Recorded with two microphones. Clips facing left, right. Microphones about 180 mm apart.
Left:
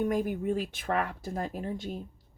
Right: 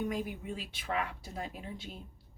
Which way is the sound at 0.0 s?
50° left (ahead or behind).